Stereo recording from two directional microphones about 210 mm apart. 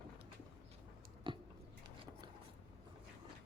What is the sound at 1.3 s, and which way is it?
Biting, 25° right (ahead or behind).